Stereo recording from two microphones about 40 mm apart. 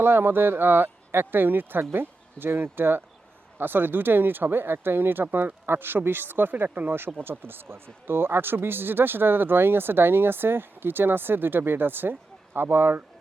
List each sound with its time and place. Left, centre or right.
0.0 s speech: right